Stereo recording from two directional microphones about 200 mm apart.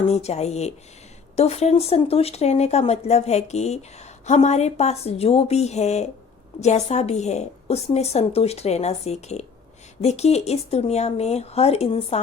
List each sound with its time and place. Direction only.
0.1 s speech: 30° left (ahead or behind)